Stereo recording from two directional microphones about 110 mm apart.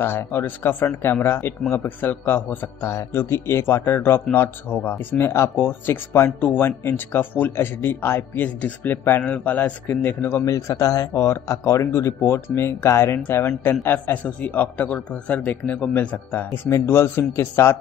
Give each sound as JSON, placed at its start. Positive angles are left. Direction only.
{"t": 0.0, "sound": "a man's voice", "side_deg": 20}